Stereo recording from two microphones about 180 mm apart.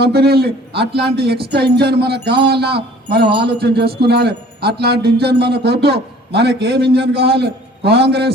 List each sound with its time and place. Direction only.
0.0 s a man's voice: 60° right (ahead or behind)